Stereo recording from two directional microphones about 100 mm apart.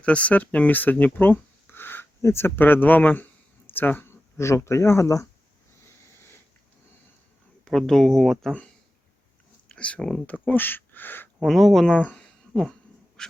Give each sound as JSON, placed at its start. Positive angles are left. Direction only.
{"t": 0.0, "sound": "speech", "side_deg": 15}
{"t": 7.6, "sound": "speech", "side_deg": 5}
{"t": 9.6, "sound": "speech", "side_deg": 10}
{"t": 11.3, "sound": "speech", "side_deg": 0}
{"t": 13.2, "sound": "duck", "side_deg": 5}